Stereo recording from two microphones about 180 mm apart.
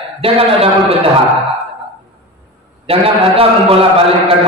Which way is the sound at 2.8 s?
30° right (ahead or behind).